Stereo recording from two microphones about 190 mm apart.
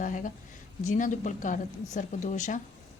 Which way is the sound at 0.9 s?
40° left (ahead or behind).